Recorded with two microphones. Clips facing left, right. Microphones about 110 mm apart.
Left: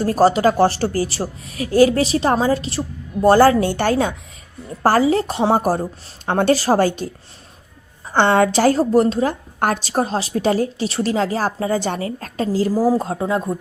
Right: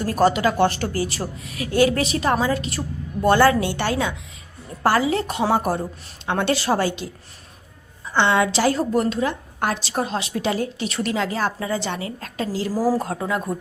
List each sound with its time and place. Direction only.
0.0 s a woman's voice: 35° left (ahead or behind)
8.1 s a woman's voice: 50° left (ahead or behind)
9.6 s a woman's voice: 45° left (ahead or behind)
12.7 s speech: 20° left (ahead or behind)